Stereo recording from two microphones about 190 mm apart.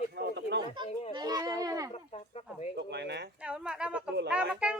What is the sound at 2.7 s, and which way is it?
Bird, 65° right (ahead or behind).